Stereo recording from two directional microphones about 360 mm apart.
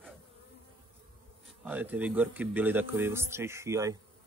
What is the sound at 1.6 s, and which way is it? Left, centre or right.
Speech, centre.